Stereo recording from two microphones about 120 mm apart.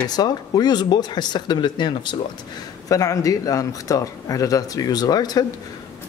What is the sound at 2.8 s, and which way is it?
Speech, 30° left (ahead or behind).